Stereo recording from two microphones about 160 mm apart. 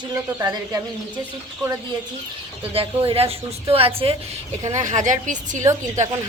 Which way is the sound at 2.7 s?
35° right (ahead or behind).